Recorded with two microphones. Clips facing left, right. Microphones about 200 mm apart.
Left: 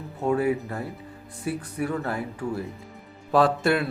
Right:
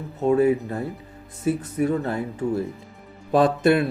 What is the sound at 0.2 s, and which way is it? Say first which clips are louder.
Speech: right 5 dB; 25° right (ahead or behind).